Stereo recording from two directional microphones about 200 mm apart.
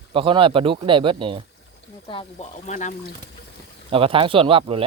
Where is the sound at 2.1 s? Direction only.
30° left (ahead or behind).